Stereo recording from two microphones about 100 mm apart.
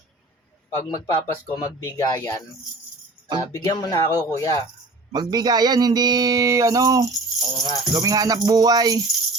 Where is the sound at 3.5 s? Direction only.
35° left (ahead or behind).